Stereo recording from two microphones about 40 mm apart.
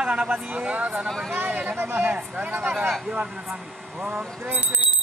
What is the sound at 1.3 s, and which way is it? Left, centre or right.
Speech, right.